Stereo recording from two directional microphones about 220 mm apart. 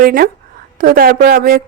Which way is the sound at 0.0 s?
40° right (ahead or behind).